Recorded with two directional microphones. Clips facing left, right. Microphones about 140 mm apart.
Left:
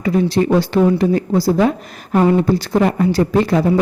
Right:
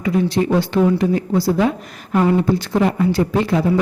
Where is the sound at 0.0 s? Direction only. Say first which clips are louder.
Left 2 dB; 35° left (ahead or behind).